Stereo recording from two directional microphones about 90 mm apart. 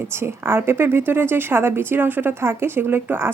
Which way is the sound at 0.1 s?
30° right (ahead or behind).